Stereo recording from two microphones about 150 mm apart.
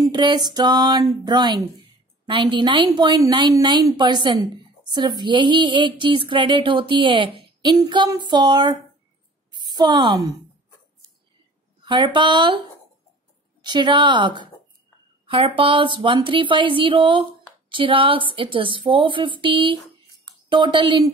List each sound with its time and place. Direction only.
0.0 s a woman's voice: 30° right (ahead or behind)
11.8 s speech: 30° right (ahead or behind)
13.6 s speech: 30° right (ahead or behind)